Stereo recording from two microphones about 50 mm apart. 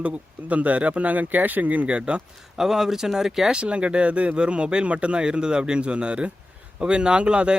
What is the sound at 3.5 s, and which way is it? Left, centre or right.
Speech, right.